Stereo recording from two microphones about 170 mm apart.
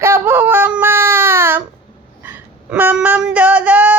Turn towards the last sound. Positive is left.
turn(degrees=-10)  # may be behind; listen again after turning